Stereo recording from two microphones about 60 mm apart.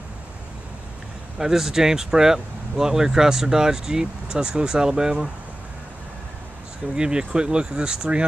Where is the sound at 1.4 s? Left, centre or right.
Centre.